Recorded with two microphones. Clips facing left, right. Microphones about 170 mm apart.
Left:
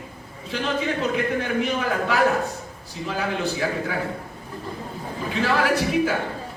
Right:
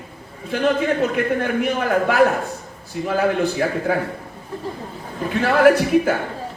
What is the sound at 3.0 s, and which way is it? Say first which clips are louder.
Speech: right 7 dB; 55° right (ahead or behind).